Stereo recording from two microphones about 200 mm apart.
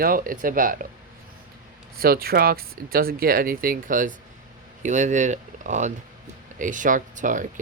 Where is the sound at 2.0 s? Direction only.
50° right (ahead or behind).